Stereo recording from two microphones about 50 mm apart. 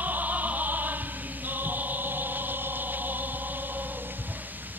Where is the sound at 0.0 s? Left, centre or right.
Right.